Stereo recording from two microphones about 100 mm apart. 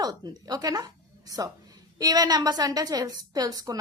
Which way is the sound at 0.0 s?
40° right (ahead or behind).